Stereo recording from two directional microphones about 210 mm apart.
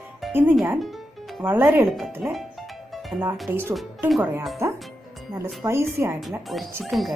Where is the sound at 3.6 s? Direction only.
Centre (ahead or behind).